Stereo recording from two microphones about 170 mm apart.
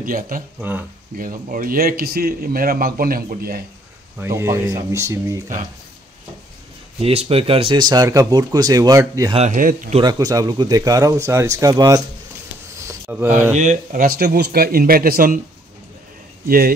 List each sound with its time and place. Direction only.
0.0 s a man's voice: 55° right (ahead or behind)
0.6 s speech: 10° right (ahead or behind)
1.1 s a man's voice: 55° right (ahead or behind)
4.2 s speech: 15° right (ahead or behind)
7.0 s speech: 35° right (ahead or behind); by 9.3 s 20° right (ahead or behind)
9.3 s a man's voice: 40° right (ahead or behind)
9.9 s speech: 25° right (ahead or behind)
13.1 s speech: 10° right (ahead or behind)
13.6 s a man's voice: 50° right (ahead or behind)
16.4 s a man's voice: 60° right (ahead or behind)